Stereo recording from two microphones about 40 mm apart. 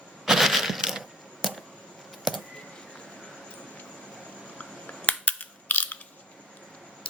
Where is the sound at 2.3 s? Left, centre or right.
Centre.